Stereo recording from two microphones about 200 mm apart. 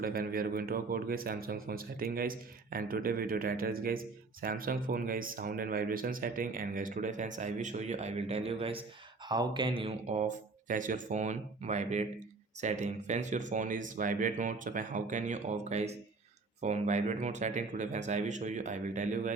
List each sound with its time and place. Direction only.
0.0 s speech: 45° right (ahead or behind)